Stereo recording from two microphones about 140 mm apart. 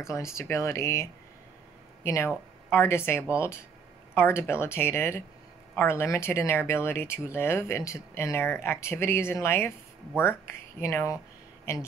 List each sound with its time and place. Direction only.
0.0 s speech: 20° left (ahead or behind)
10.8 s speech: 20° left (ahead or behind)